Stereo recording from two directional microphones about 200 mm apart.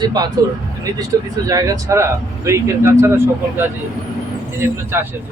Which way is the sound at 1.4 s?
15° right (ahead or behind).